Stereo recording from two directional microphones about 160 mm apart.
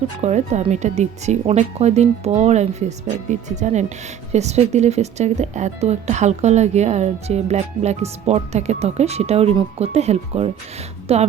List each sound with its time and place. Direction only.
0.2 s speech: 45° right (ahead or behind)